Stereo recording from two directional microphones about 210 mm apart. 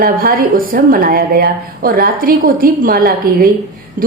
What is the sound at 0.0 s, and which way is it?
A woman's voice, 45° right (ahead or behind).